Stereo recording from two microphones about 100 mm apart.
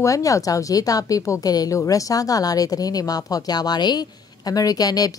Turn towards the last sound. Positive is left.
turn(degrees=40)  # may be behind; listen again after turning